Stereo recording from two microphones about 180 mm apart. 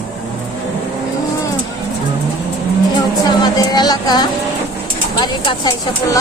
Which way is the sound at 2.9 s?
20° left (ahead or behind).